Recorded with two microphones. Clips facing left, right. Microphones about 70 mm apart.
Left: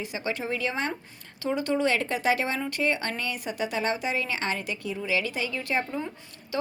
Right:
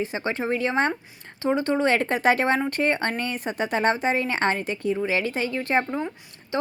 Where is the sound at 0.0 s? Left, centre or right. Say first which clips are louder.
Right 5 dB; right.